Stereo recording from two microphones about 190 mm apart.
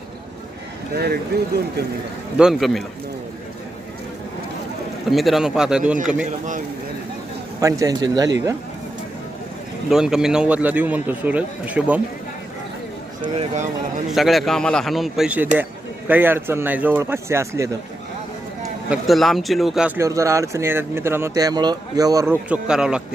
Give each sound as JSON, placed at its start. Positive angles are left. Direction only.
{"t": 0.9, "sound": "speech", "side_deg": -55}
{"t": 2.4, "sound": "a man's voice", "side_deg": 0}
{"t": 5.0, "sound": "a man's voice", "side_deg": 0}
{"t": 7.6, "sound": "speech", "side_deg": -20}
{"t": 9.9, "sound": "speech", "side_deg": -5}
{"t": 13.2, "sound": "speech", "side_deg": -35}
{"t": 14.1, "sound": "a man's voice", "side_deg": 0}
{"t": 18.9, "sound": "a man's voice", "side_deg": 0}
{"t": 20.0, "sound": "speech", "side_deg": -15}